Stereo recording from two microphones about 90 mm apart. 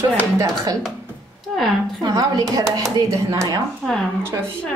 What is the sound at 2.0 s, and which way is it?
Speech, 45° right (ahead or behind).